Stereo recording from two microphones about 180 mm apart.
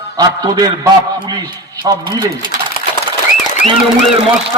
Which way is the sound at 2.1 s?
25° right (ahead or behind).